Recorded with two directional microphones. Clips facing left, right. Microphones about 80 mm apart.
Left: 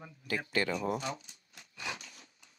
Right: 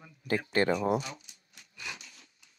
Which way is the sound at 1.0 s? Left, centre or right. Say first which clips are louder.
Left 5 dB; left.